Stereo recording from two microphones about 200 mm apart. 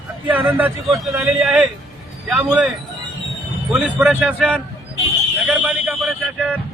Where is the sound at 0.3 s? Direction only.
5° right (ahead or behind).